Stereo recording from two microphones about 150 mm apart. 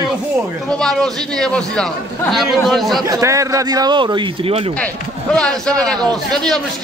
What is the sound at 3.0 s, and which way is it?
A man's voice, 25° right (ahead or behind).